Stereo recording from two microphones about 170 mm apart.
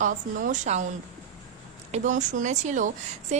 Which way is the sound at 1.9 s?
45° right (ahead or behind).